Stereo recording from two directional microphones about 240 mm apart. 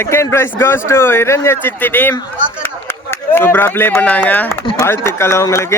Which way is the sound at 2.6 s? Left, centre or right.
Centre.